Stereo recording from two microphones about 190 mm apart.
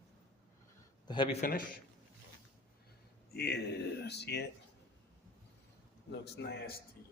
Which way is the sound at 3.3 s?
55° left (ahead or behind).